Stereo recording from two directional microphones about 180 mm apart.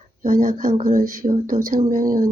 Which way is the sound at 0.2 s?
45° right (ahead or behind).